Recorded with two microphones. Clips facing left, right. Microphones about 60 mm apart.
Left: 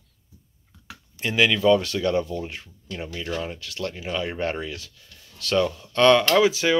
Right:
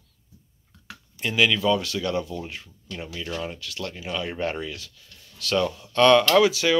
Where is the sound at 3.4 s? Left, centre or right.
Left.